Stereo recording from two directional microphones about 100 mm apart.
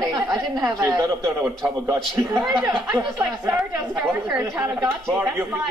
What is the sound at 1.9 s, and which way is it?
A man's voice, 30° right (ahead or behind).